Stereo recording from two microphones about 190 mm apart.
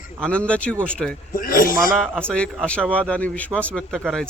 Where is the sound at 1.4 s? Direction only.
50° left (ahead or behind).